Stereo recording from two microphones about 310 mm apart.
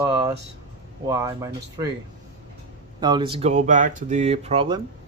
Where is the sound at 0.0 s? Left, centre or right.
Centre.